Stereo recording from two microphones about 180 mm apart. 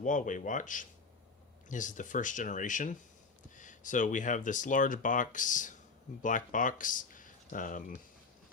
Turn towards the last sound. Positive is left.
turn(degrees=45)  # may be behind; listen again after turning